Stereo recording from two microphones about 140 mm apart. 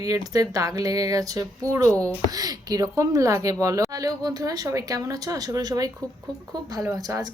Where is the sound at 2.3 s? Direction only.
25° right (ahead or behind).